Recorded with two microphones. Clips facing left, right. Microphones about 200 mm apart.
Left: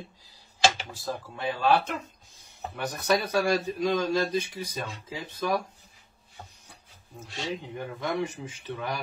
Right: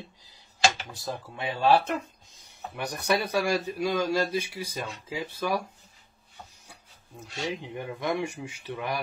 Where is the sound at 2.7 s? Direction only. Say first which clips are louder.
Left 1 dB; 15° right (ahead or behind).